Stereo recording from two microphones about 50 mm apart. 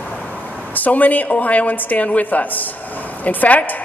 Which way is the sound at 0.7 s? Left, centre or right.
Left.